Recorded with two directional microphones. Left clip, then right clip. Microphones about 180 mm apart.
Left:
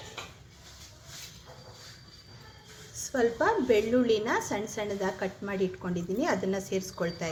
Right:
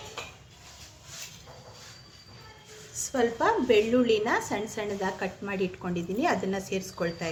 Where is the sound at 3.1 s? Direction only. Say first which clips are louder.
Right 1 dB; 15° right (ahead or behind).